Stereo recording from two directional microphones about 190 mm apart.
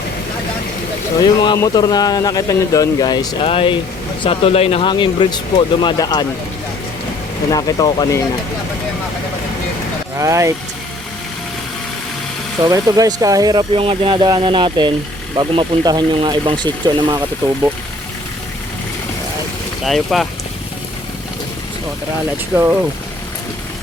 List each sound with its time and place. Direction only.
1.2 s a man's voice: 20° left (ahead or behind)
7.5 s a man's voice: 20° left (ahead or behind)
10.2 s speech: 15° right (ahead or behind)
12.6 s speech: 20° right (ahead or behind)
19.8 s speech: centre (ahead or behind)
22.5 s speech: 10° right (ahead or behind)